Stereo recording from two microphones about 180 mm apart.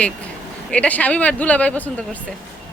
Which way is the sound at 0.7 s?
10° left (ahead or behind).